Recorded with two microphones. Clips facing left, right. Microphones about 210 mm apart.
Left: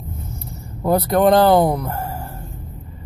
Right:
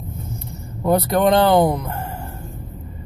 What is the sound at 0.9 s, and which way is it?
Speech, 35° left (ahead or behind).